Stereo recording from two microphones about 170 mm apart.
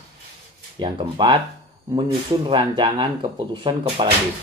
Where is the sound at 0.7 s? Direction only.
30° right (ahead or behind).